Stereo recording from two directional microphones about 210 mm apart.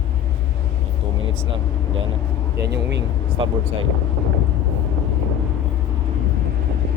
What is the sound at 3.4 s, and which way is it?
Speech, 25° right (ahead or behind).